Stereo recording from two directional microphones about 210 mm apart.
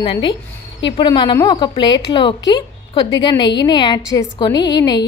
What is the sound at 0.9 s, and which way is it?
A woman's voice, 20° left (ahead or behind).